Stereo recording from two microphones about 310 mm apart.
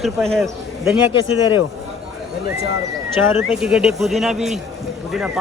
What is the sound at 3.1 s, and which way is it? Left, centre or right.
Speech, centre.